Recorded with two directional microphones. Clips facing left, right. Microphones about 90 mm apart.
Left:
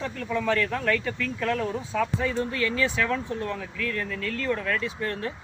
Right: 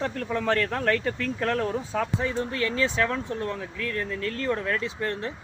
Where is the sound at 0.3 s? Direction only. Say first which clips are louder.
Left 1 dB; 40° right (ahead or behind).